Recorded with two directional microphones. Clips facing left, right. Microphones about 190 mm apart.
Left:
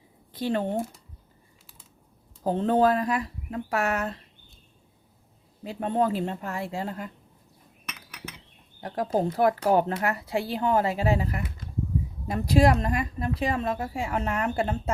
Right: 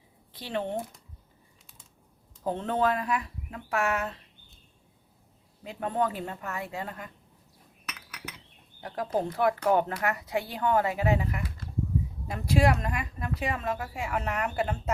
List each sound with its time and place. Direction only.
0.3 s speech: 45° left (ahead or behind)
2.4 s speech: 35° left (ahead or behind)
5.6 s a woman's voice: 30° left (ahead or behind)
8.8 s a woman's voice: 40° left (ahead or behind)